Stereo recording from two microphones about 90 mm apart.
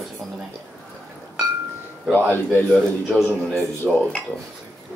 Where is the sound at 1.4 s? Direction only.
50° right (ahead or behind).